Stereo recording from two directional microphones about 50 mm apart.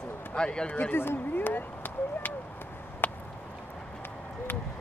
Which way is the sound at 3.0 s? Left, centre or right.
Left.